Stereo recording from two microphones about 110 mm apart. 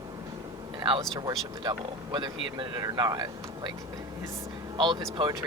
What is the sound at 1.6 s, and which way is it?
Speech, 45° right (ahead or behind).